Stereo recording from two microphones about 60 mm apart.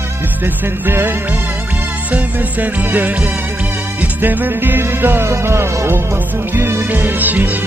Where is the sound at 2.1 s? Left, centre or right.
Right.